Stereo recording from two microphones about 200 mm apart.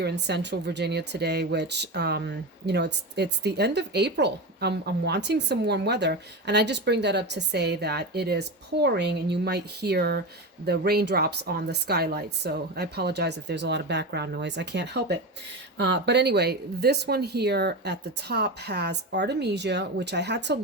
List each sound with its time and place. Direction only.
0.0 s speech: 55° right (ahead or behind)